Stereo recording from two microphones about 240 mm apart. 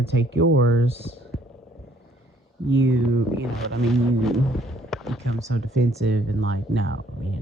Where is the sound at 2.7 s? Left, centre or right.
Right.